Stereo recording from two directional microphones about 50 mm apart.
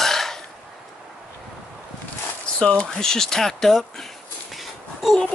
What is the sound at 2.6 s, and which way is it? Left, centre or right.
Speech, centre.